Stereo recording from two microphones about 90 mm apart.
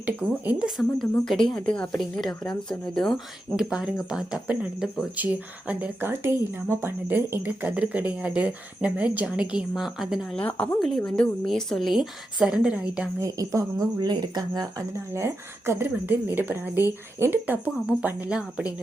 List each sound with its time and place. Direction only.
0.6 s a woman's voice: centre (ahead or behind)
3.5 s speech: 10° right (ahead or behind)
10.3 s a woman's voice: 15° left (ahead or behind); by 13.1 s 10° right (ahead or behind)
13.1 s a woman's voice: 35° right (ahead or behind)
14.0 s speech: 50° right (ahead or behind)
14.9 s a woman's voice: 30° right (ahead or behind)
18.3 s speech: 10° right (ahead or behind)